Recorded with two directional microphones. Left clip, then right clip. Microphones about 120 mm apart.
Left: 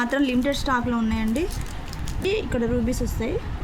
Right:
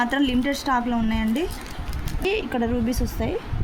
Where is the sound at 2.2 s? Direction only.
50° right (ahead or behind).